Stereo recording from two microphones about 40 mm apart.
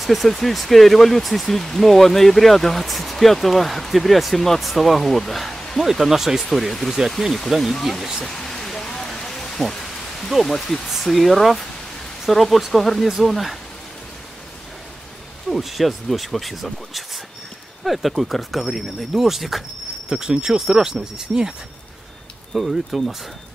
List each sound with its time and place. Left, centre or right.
0.0 s speech: centre
5.8 s speech: centre
7.5 s speech: centre
8.3 s a sound: centre
9.6 s rain: centre
10.4 s speech: centre
15.5 s speech: centre
20.1 s speech: centre
22.5 s speech: centre